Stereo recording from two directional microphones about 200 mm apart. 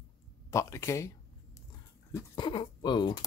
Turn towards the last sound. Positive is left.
turn(degrees=20)  # may be behind; listen again after turning